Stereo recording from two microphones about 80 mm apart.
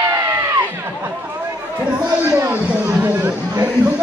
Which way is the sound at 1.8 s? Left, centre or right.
Right.